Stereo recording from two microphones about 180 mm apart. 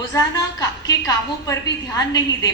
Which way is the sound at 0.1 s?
20° left (ahead or behind).